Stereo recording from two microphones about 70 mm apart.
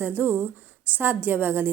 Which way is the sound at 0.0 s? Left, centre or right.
Right.